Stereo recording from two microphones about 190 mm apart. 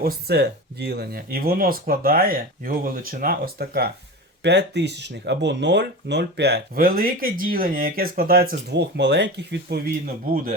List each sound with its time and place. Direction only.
0.0 s speech: 55° right (ahead or behind)